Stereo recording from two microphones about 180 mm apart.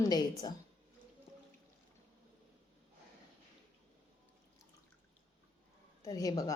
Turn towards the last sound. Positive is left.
turn(degrees=20)  # may be behind; listen again after turning